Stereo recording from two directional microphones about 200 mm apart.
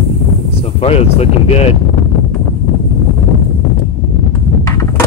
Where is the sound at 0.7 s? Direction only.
30° left (ahead or behind).